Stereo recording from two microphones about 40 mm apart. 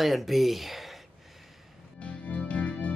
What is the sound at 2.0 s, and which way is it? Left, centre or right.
Music, left.